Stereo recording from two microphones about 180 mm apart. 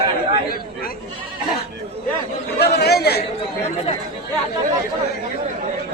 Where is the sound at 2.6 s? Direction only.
60° left (ahead or behind).